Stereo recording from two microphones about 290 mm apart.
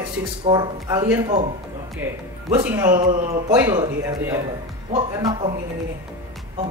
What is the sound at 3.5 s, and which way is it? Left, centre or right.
Speech, centre.